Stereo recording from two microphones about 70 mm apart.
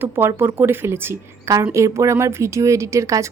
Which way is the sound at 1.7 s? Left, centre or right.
Right.